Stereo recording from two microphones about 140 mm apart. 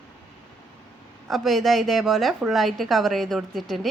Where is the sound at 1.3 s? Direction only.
Centre (ahead or behind).